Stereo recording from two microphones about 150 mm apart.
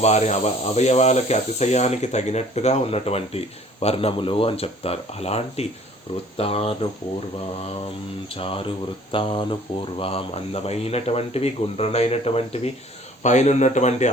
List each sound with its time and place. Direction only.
0.0 s speech: 45° left (ahead or behind)
8.4 s speech: 35° left (ahead or behind)